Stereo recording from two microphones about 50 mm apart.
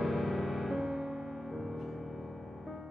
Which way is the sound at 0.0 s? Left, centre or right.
Centre.